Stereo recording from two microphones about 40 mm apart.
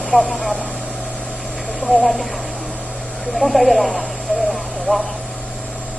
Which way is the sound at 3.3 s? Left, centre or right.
Centre.